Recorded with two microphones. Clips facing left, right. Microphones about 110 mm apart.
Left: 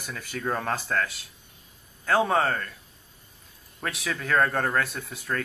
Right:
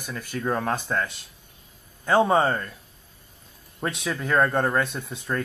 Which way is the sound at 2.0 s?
Centre (ahead or behind).